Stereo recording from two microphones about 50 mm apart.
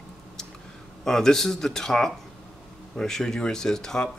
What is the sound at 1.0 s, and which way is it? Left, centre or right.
Speech, centre.